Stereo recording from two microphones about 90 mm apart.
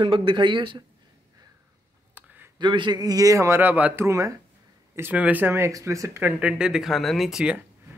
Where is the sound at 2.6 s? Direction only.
60° right (ahead or behind); by 3.6 s 35° right (ahead or behind).